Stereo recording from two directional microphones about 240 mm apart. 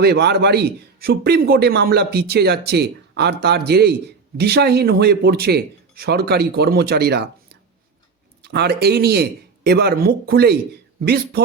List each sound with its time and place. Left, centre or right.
0.0 s a man's voice: right
8.4 s a man's voice: right